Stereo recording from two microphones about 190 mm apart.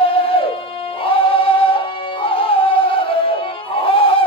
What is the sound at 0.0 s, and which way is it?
Music, 30° left (ahead or behind).